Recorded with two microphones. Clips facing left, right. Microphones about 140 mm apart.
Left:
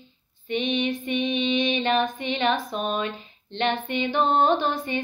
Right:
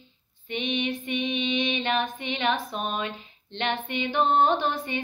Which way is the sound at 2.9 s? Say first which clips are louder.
Left 3 dB; 15° right (ahead or behind).